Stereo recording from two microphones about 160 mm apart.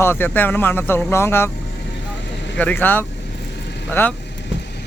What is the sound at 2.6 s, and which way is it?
Speech, 10° left (ahead or behind).